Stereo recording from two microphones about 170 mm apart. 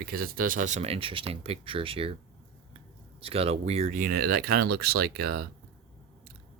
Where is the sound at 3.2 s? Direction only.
35° right (ahead or behind); by 5.4 s 65° right (ahead or behind).